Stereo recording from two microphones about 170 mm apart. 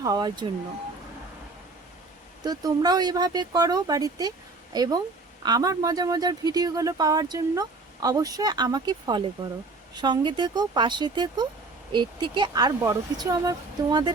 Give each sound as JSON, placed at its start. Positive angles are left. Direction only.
{"t": 0.0, "sound": "speech", "side_deg": -25}
{"t": 2.4, "sound": "speech", "side_deg": -20}